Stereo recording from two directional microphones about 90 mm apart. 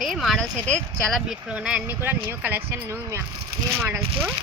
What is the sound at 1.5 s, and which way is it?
Speech, 15° right (ahead or behind).